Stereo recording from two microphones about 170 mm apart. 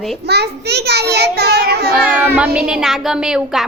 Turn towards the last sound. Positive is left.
turn(degrees=-5)  # may be behind; listen again after turning